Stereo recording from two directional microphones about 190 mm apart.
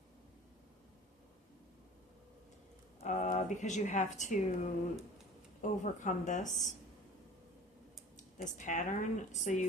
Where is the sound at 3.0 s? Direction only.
40° left (ahead or behind).